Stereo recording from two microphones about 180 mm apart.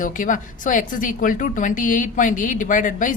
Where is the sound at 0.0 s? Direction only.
45° left (ahead or behind).